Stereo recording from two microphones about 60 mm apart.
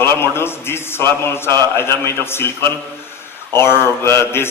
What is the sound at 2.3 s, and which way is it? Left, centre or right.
Speech, left.